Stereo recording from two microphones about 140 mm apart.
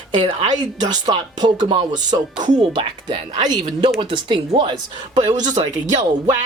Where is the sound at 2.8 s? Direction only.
35° right (ahead or behind).